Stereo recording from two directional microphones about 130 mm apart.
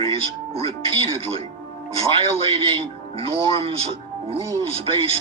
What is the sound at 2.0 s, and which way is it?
A man's voice, 45° right (ahead or behind).